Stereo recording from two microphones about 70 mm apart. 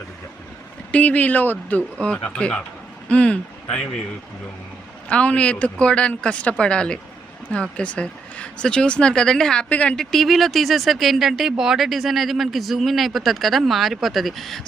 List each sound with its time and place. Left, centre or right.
0.9 s speech: left
5.0 s speech: centre
9.6 s speech: left
9.9 s speech: centre